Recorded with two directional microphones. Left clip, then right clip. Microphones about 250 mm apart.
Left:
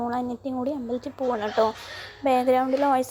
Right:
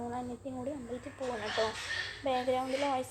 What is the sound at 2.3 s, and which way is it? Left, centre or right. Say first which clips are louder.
Speech: left 11 dB; left.